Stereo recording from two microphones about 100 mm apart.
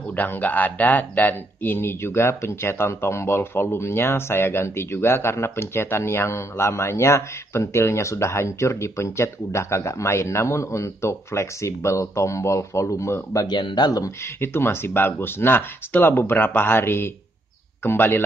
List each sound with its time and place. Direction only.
0.1 s speech: 15° left (ahead or behind); by 13.6 s 35° left (ahead or behind)
13.6 s speech: 50° left (ahead or behind)
14.4 s speech: 25° left (ahead or behind)